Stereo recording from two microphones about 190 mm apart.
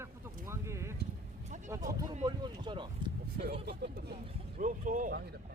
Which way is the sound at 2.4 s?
25° right (ahead or behind).